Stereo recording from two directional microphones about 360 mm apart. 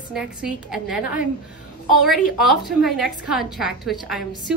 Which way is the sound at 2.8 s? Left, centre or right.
Centre.